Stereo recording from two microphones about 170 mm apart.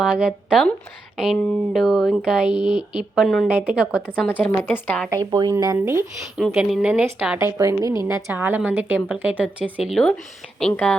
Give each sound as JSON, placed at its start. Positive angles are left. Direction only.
{"t": 0.0, "sound": "a woman's voice", "side_deg": -5}
{"t": 4.3, "sound": "a woman's voice", "side_deg": 10}
{"t": 5.1, "sound": "speech", "side_deg": -25}
{"t": 7.3, "sound": "a woman's voice", "side_deg": -15}